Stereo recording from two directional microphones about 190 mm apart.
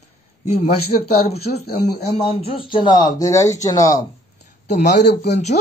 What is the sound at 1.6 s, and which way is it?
Speech, 55° left (ahead or behind).